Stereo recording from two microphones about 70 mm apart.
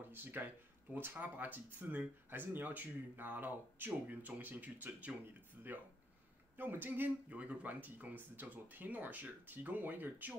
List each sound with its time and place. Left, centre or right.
0.1 s speech: right
6.5 s speech: right